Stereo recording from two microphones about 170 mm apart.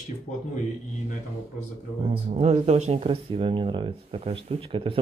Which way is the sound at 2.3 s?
40° right (ahead or behind).